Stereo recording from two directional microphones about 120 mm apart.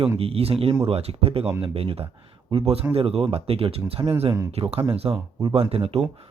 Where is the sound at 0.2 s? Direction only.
55° right (ahead or behind).